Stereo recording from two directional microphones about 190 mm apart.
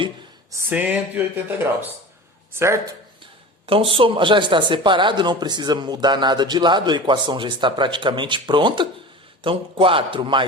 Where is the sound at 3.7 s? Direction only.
30° right (ahead or behind).